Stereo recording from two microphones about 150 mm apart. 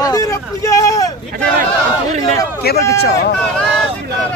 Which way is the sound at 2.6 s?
90° left.